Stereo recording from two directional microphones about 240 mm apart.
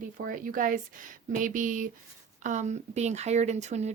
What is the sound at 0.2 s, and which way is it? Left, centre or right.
Speech, right.